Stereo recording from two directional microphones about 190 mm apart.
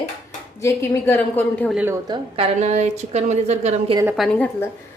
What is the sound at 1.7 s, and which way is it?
Speech, 10° right (ahead or behind).